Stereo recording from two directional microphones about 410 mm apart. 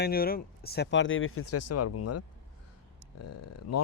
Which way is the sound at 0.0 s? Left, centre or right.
Left.